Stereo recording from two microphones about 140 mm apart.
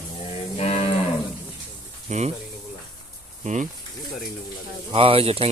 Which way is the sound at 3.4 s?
55° right (ahead or behind).